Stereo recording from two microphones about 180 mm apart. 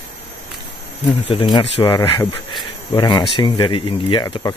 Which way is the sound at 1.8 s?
20° left (ahead or behind).